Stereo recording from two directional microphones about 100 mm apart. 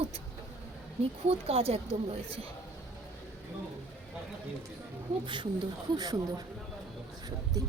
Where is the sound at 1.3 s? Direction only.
85° right.